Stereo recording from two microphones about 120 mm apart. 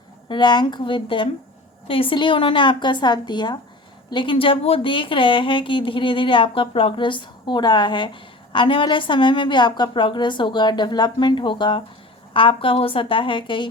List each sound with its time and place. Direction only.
0.3 s speech: 40° left (ahead or behind)